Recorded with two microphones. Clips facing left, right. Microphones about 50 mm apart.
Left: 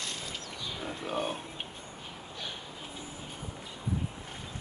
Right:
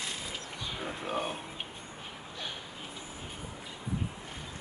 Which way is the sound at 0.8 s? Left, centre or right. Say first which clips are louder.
Left 1 dB; centre.